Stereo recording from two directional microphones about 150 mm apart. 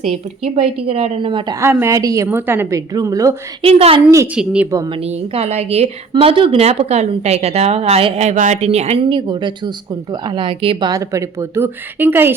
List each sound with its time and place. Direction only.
0.0 s a woman's voice: 45° right (ahead or behind)
1.5 s speech: 15° right (ahead or behind)
3.6 s a woman's voice: 40° right (ahead or behind)
4.4 s speech: 10° right (ahead or behind)
4.9 s a woman's voice: 40° right (ahead or behind)
9.0 s speech: 30° right (ahead or behind); by 12.3 s 15° right (ahead or behind)